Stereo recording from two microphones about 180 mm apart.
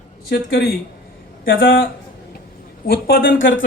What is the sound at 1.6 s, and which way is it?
Speech, 55° left (ahead or behind).